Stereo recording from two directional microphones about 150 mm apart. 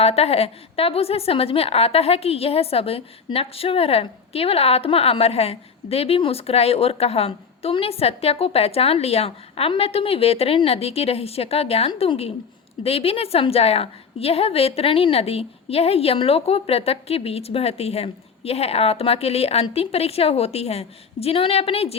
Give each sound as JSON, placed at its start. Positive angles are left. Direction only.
{"t": 0.0, "sound": "a woman's voice", "side_deg": 40}